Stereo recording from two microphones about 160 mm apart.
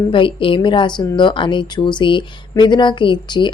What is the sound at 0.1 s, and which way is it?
A woman's voice, 30° left (ahead or behind).